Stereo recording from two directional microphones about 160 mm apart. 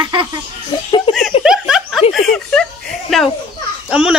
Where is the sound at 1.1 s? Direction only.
30° left (ahead or behind).